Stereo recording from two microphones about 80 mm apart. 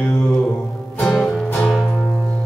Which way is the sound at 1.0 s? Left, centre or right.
Centre.